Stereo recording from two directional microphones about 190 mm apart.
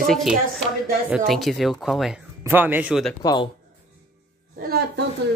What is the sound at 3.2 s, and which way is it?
Speech, 25° left (ahead or behind).